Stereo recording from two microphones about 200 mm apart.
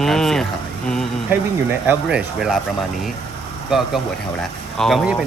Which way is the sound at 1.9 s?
5° right (ahead or behind).